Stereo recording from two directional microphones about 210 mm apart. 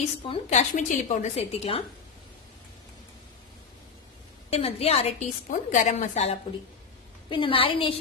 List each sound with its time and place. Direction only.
0.3 s a woman's voice: 30° left (ahead or behind)
4.5 s a woman's voice: 30° left (ahead or behind)